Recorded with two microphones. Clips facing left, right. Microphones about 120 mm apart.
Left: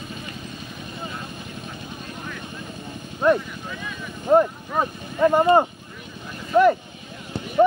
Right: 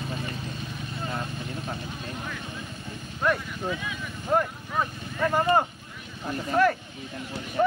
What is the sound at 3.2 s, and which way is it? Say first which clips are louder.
Vehicle: left 7 dB; 20° left (ahead or behind).